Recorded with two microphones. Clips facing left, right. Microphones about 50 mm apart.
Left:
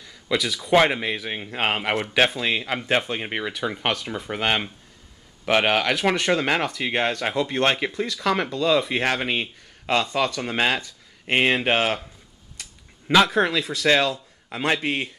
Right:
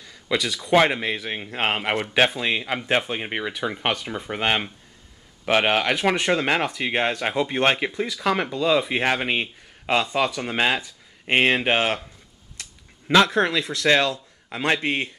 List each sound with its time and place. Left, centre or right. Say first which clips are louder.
0.0 s speech: even; centre
13.1 s speech: even; centre
14.8 s speech: right 1 dB; centre